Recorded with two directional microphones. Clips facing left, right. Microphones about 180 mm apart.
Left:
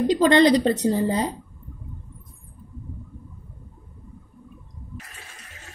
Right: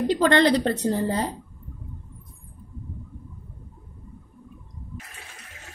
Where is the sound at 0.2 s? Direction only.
15° left (ahead or behind).